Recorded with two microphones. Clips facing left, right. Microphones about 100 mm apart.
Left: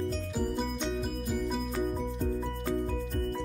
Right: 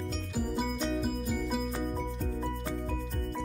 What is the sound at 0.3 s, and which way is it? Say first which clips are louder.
Music: left 1 dB; centre (ahead or behind).